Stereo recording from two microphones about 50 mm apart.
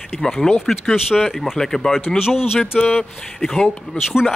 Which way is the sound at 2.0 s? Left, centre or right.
Centre.